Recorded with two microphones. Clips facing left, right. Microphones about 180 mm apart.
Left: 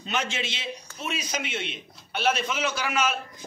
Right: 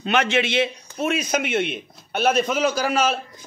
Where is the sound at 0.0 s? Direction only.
65° right (ahead or behind).